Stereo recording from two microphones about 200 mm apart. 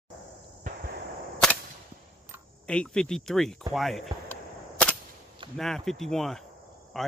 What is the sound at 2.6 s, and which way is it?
Speech, 5° left (ahead or behind).